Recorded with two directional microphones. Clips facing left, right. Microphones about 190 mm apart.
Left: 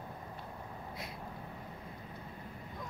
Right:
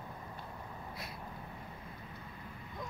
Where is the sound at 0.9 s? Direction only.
20° left (ahead or behind).